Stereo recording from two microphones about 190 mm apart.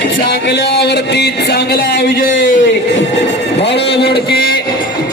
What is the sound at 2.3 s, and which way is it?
Speech, 75° left (ahead or behind).